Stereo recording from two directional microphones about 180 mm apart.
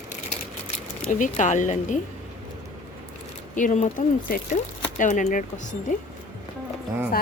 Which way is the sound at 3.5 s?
45° left (ahead or behind).